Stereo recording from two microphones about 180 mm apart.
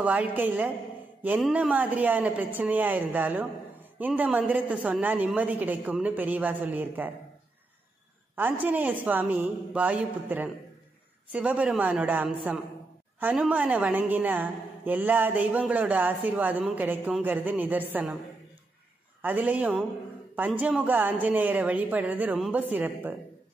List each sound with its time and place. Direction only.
0.0 s a woman's voice: 10° right (ahead or behind)
8.4 s a woman's voice: 10° right (ahead or behind)
19.2 s a woman's voice: 10° right (ahead or behind)